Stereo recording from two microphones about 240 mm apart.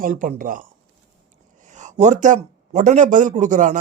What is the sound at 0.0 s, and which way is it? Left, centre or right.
Speech, right.